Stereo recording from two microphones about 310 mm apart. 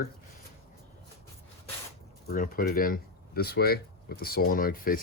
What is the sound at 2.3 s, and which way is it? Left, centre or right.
Speech, left.